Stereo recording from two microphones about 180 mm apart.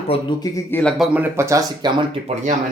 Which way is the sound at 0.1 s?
25° left (ahead or behind).